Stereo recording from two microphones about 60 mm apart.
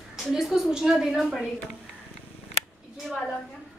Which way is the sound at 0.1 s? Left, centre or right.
Centre.